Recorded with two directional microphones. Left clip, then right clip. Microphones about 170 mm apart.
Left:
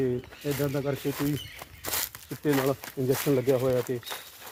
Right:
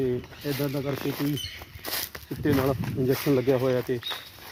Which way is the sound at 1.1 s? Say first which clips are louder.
Right 1 dB; 5° right (ahead or behind).